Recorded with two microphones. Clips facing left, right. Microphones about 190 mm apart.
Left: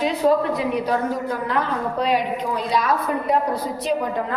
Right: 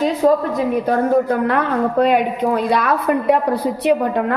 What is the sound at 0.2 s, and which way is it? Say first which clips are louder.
A woman's voice: right 2 dB; 45° right (ahead or behind).